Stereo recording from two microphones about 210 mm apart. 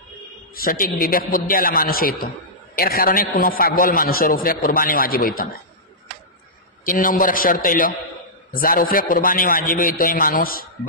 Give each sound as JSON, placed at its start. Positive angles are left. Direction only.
{"t": 0.6, "sound": "a man's voice", "side_deg": 45}
{"t": 6.9, "sound": "a man's voice", "side_deg": 40}